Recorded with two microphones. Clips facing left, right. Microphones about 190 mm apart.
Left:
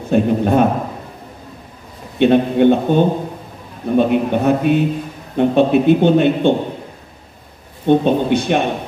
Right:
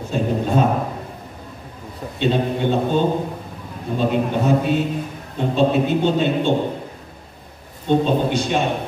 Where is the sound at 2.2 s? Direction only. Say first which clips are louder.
Left 8 dB; 60° left (ahead or behind).